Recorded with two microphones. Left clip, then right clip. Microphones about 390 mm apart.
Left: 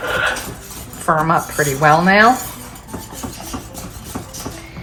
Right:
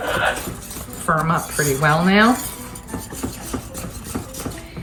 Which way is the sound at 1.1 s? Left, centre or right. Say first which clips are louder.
Left 4 dB; centre.